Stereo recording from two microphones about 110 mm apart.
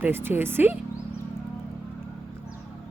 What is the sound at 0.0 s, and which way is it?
Speech, 20° right (ahead or behind).